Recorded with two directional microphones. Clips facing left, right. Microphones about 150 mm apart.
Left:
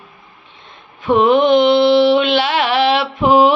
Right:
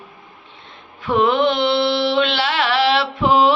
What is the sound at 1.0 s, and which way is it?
Mantra, 20° left (ahead or behind).